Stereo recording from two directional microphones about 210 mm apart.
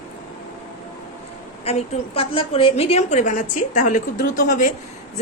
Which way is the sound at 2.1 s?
25° left (ahead or behind).